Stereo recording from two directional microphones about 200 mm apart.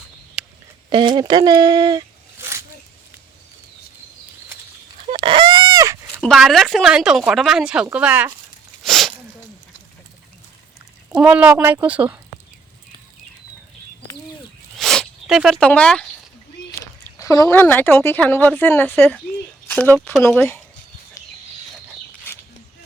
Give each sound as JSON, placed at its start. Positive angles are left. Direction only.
{"t": 0.9, "sound": "speech", "side_deg": -25}
{"t": 5.1, "sound": "chicken", "side_deg": -25}
{"t": 6.2, "sound": "speech", "side_deg": 0}
{"t": 8.8, "sound": "a sound", "side_deg": 0}
{"t": 11.1, "sound": "speech", "side_deg": -5}
{"t": 14.8, "sound": "zipper", "side_deg": 0}
{"t": 16.8, "sound": "a woman's voice", "side_deg": 15}
{"t": 21.2, "sound": "a sound", "side_deg": 15}